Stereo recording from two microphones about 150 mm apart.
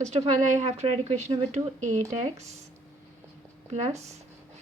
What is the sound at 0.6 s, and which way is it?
Speech, 45° right (ahead or behind).